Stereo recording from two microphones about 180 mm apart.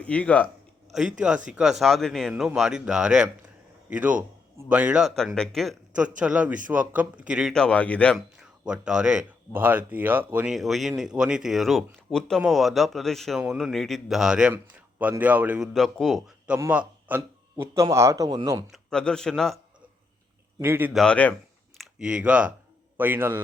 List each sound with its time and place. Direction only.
0.0 s a man's voice: 5° left (ahead or behind); by 18.6 s 20° right (ahead or behind)
18.7 s a man's voice: 5° left (ahead or behind)
20.6 s a man's voice: 10° right (ahead or behind)
20.9 s speech: 5° left (ahead or behind)
21.8 s a man's voice: 5° right (ahead or behind)